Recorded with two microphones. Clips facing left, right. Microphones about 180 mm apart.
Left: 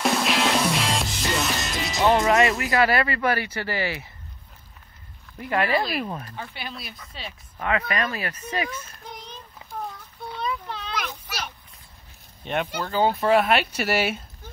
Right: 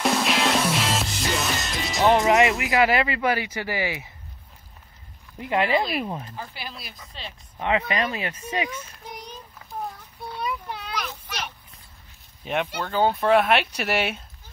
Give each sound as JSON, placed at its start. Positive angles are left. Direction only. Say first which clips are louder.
{"t": 0.0, "sound": "music", "louder": "even", "side_deg": 0}
{"t": 2.2, "sound": "speech", "louder": "right 1 dB", "side_deg": -15}
{"t": 5.4, "sound": "speech", "louder": "right 1 dB", "side_deg": -20}
{"t": 6.3, "sound": "speech", "louder": "left 1 dB", "side_deg": 0}
{"t": 7.5, "sound": "speech", "louder": "right 1 dB", "side_deg": -20}
{"t": 10.3, "sound": "child singing", "louder": "even", "side_deg": -10}
{"t": 11.0, "sound": "a sound", "louder": "even", "side_deg": 5}
{"t": 12.4, "sound": "speech", "louder": "even", "side_deg": 0}